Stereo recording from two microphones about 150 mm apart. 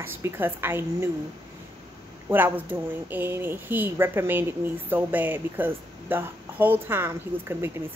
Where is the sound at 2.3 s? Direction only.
10° right (ahead or behind).